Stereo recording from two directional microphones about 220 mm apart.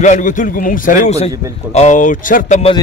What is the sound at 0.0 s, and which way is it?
Speech, 35° left (ahead or behind).